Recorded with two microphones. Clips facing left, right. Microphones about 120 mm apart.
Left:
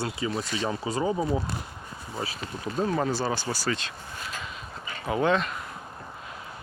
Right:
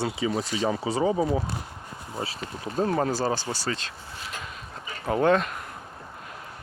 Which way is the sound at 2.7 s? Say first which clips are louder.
Right 2 dB; 40° right (ahead or behind).